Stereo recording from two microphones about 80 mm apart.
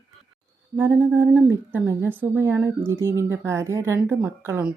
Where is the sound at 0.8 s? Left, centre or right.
Right.